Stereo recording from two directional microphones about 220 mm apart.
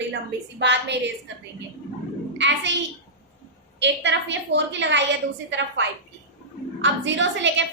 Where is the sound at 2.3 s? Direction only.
55° right (ahead or behind).